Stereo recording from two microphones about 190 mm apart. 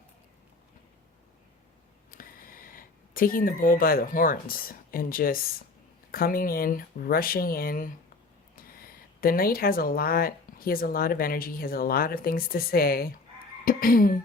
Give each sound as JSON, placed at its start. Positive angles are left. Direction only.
{"t": 2.1, "sound": "speech", "side_deg": 50}
{"t": 9.2, "sound": "speech", "side_deg": 50}